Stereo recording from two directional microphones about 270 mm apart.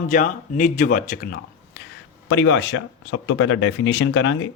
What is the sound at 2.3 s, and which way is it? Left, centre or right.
Speech, left.